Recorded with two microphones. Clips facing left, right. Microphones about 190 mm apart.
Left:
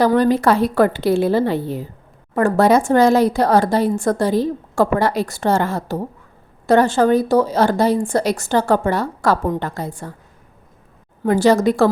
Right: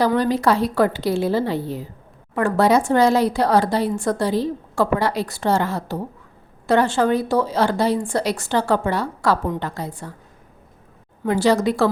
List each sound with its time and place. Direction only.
0.0 s a woman's voice: 50° left (ahead or behind)
2.3 s a woman's voice: 45° left (ahead or behind)
11.3 s a woman's voice: 45° left (ahead or behind)